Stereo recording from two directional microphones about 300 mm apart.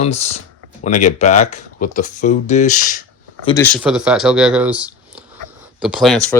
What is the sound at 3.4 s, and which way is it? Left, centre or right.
Speech, centre.